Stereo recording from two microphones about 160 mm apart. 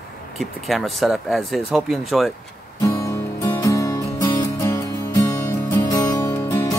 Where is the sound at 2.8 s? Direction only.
15° left (ahead or behind).